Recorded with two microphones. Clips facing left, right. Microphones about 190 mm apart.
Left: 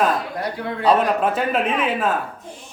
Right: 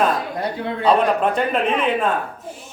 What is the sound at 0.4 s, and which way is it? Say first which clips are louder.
Speech: right 2 dB; 25° right (ahead or behind).